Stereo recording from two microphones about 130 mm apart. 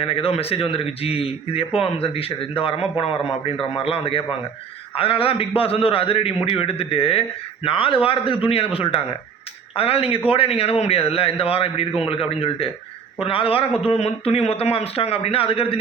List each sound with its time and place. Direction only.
0.0 s a man's voice: 45° left (ahead or behind)